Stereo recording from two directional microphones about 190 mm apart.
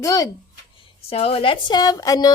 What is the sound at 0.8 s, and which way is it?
A woman's voice, 30° left (ahead or behind).